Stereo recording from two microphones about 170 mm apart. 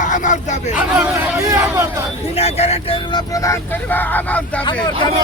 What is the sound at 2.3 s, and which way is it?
Speech, 35° left (ahead or behind).